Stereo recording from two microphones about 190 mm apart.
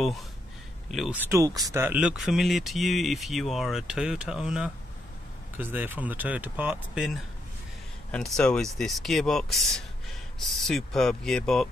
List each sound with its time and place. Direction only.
0.9 s speech: 5° right (ahead or behind)
8.1 s speech: 5° left (ahead or behind)